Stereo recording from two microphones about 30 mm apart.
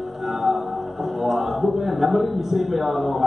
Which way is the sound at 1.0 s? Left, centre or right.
Centre.